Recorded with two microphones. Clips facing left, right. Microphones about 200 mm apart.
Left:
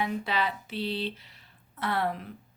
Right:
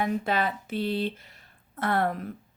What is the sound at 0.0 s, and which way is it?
Speech, 50° right (ahead or behind).